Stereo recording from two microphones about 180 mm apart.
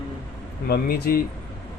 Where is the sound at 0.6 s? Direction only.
60° left (ahead or behind).